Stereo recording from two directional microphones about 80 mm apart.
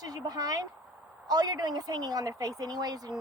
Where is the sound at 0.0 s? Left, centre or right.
Right.